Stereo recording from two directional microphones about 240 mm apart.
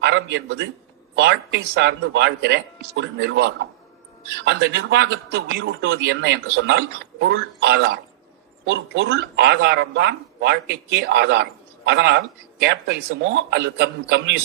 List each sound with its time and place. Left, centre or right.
0.0 s a man's voice: right